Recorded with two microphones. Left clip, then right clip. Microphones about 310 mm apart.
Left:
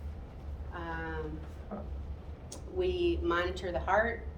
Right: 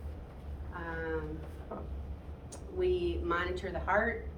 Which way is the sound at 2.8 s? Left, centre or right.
Left.